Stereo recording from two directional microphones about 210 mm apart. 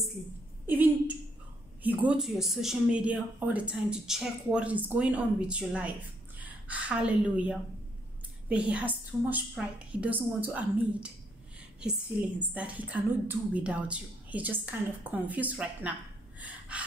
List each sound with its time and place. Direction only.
0.7 s a sound: 10° right (ahead or behind)
1.8 s a woman's voice: 10° right (ahead or behind)
16.3 s gasp: 5° right (ahead or behind)